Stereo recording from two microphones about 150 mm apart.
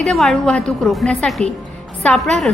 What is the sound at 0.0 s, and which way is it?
A woman's voice, centre (ahead or behind).